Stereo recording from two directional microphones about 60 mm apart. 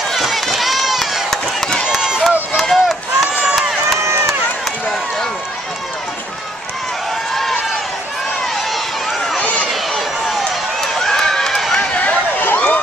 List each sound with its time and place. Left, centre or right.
0.1 s run: centre
1.9 s run: centre
2.5 s chop: centre
3.5 s crowd: centre
9.4 s run: left
9.7 s run: centre
11.9 s a sound: left